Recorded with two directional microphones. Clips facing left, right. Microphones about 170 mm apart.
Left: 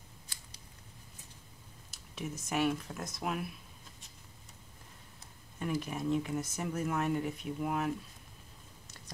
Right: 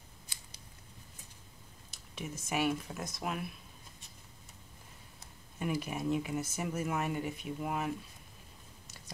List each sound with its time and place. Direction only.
1.9 s speech: centre (ahead or behind)
5.6 s speech: 10° right (ahead or behind)